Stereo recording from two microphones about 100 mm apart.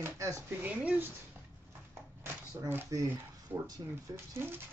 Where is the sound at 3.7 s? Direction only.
25° right (ahead or behind).